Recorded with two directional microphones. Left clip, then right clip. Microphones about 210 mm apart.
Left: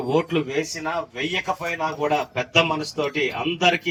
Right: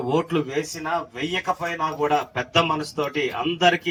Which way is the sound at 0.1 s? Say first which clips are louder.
Left 1 dB; 45° right (ahead or behind).